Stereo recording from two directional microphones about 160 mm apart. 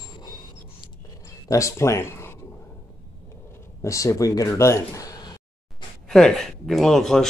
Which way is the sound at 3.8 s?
20° left (ahead or behind).